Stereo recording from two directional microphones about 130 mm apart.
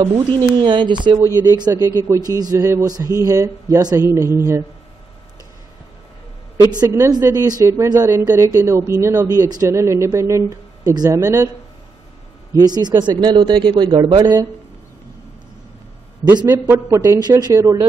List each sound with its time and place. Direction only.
0.0 s speech: 35° right (ahead or behind)
1.2 s speech: 25° right (ahead or behind)
6.8 s speech: 25° right (ahead or behind)
12.5 s speech: 30° right (ahead or behind)
16.9 s speech: 25° right (ahead or behind)